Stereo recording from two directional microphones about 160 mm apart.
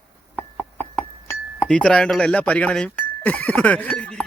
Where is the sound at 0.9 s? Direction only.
10° left (ahead or behind).